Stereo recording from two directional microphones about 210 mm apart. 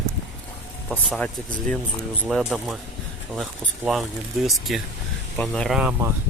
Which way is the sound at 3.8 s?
Centre (ahead or behind).